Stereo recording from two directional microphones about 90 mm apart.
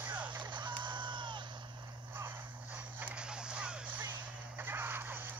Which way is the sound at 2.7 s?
15° right (ahead or behind).